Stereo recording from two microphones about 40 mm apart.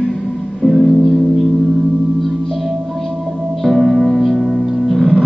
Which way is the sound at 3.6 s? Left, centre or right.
Centre.